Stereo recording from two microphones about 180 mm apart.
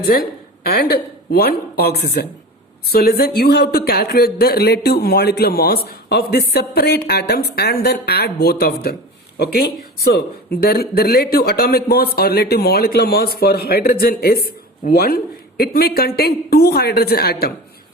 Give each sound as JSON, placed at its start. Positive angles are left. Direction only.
{"t": 0.1, "sound": "speech", "side_deg": 60}